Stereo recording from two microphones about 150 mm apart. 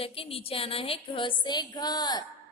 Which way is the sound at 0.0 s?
40° left (ahead or behind).